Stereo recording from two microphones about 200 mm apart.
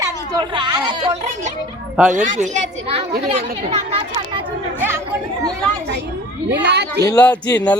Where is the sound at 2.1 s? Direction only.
40° right (ahead or behind).